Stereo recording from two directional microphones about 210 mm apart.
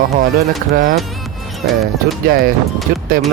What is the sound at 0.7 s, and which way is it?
Speech, 40° right (ahead or behind).